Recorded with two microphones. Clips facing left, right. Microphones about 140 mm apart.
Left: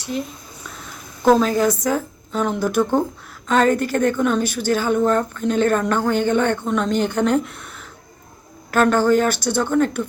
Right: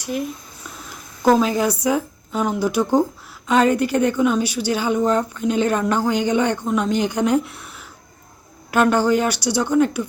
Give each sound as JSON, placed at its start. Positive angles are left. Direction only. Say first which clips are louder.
{"t": 1.4, "sound": "a woman's voice", "louder": "left 1 dB", "side_deg": -15}